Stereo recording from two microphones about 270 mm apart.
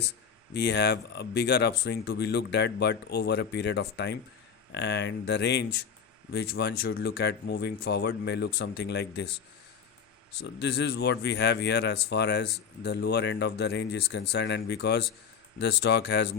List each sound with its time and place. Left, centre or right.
0.5 s speech: left
10.4 s speech: left